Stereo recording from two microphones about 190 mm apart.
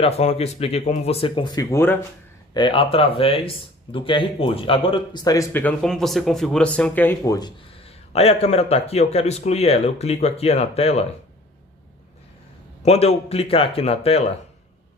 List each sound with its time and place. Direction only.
0.0 s speech: 35° left (ahead or behind); by 2.0 s 15° left (ahead or behind)
2.5 s speech: 25° left (ahead or behind); by 7.3 s 10° left (ahead or behind)
7.3 s speech: 25° left (ahead or behind)
12.8 s speech: 35° left (ahead or behind)